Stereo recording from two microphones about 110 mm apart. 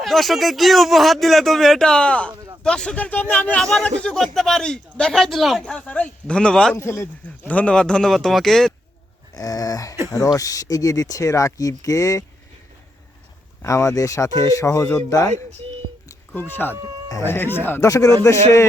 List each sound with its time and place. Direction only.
0.0 s speech: centre (ahead or behind)
5.7 s speech: 10° left (ahead or behind)
6.7 s speech: 25° left (ahead or behind); by 8.7 s centre (ahead or behind)
9.3 s speech: 35° left (ahead or behind)
13.6 s speech: 25° left (ahead or behind)
16.3 s speech: 20° left (ahead or behind)
17.7 s speech: 30° left (ahead or behind)